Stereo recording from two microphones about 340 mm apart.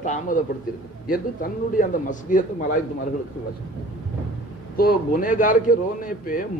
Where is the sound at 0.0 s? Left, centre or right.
Left.